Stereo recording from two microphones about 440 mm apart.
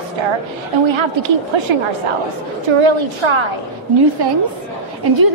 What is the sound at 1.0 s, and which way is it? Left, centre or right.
Speech, right.